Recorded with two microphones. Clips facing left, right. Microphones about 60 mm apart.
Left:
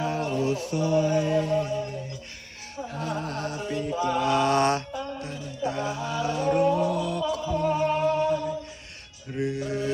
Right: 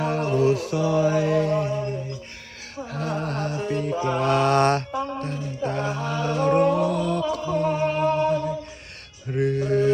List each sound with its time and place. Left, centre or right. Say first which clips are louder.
0.0 s music: right 5 dB; right
2.9 s music: right 4 dB; right
7.8 s a sound: right 2 dB; right
9.3 s mantra: right 6 dB; right